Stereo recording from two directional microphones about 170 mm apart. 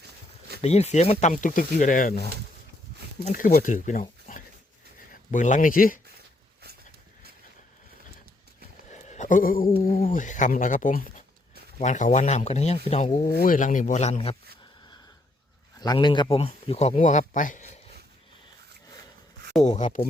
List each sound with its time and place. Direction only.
0.6 s speech: 40° left (ahead or behind)
3.2 s speech: 50° left (ahead or behind)
4.3 s dog: 55° left (ahead or behind)
5.3 s speech: 50° left (ahead or behind)
8.9 s a sound: 45° left (ahead or behind)
9.8 s speech: 55° left (ahead or behind); by 13.2 s 40° left (ahead or behind)
13.2 s speech: 55° left (ahead or behind); by 14.3 s 40° left (ahead or behind)
15.8 s speech: 25° left (ahead or behind); by 17.7 s 45° left (ahead or behind)
19.6 s speech: 45° left (ahead or behind)